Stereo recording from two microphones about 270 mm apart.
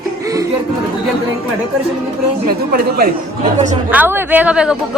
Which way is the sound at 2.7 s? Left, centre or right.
Right.